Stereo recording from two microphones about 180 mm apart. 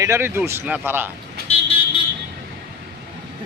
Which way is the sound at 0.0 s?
15° right (ahead or behind).